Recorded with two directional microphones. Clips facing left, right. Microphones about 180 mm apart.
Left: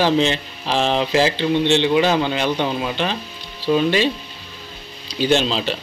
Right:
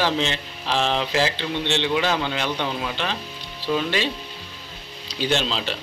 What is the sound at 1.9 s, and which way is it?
Speech, 25° left (ahead or behind).